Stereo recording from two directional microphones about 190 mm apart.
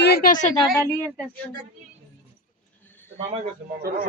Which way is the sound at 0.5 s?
15° left (ahead or behind).